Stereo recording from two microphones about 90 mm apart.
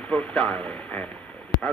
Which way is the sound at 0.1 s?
10° left (ahead or behind).